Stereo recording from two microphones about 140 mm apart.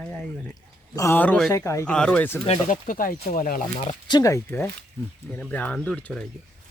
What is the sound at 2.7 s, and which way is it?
Speech, 80° left.